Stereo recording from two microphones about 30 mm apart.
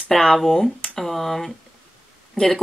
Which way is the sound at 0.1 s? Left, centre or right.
Centre.